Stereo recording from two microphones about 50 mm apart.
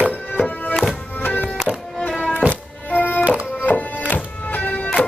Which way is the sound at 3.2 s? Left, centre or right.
Right.